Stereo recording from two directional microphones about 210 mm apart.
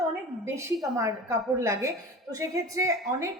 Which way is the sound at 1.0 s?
15° right (ahead or behind).